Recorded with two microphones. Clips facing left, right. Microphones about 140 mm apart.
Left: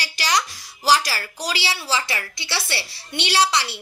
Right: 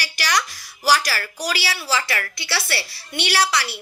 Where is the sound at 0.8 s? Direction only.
20° left (ahead or behind).